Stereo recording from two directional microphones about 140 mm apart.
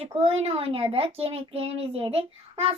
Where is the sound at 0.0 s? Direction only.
45° right (ahead or behind).